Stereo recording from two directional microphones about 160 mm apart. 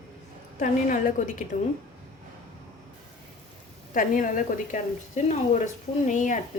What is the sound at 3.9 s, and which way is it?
A woman's voice, 55° left (ahead or behind).